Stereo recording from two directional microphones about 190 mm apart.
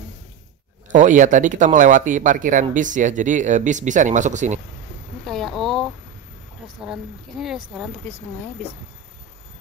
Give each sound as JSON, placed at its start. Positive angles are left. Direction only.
{"t": 0.8, "sound": "speech", "side_deg": -40}
{"t": 5.2, "sound": "a sound", "side_deg": 0}
{"t": 6.9, "sound": "speech", "side_deg": 0}